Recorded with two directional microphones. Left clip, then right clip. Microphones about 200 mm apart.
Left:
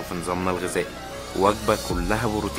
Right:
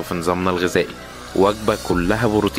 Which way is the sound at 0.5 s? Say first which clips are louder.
Right 6 dB; 25° right (ahead or behind).